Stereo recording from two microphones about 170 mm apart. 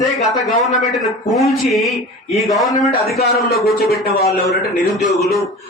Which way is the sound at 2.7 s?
65° left (ahead or behind).